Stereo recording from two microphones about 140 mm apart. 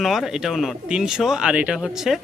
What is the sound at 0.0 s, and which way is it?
Speech, centre (ahead or behind).